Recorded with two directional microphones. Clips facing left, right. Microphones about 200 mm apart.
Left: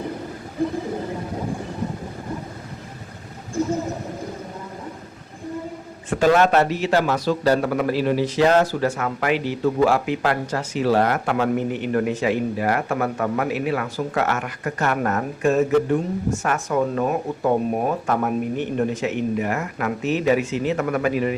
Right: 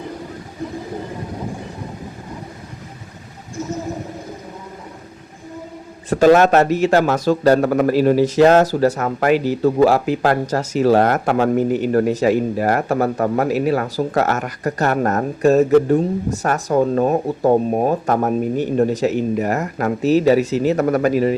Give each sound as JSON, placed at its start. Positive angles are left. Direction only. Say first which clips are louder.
{"t": 6.1, "sound": "a man's voice", "louder": "right 5 dB", "side_deg": -40}